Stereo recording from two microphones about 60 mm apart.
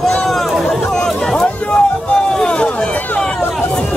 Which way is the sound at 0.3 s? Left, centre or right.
Centre.